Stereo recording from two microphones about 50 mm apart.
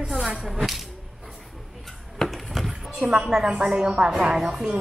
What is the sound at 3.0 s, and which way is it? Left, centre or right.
A woman's voice, right.